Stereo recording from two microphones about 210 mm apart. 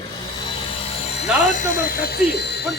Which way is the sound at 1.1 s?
40° left (ahead or behind).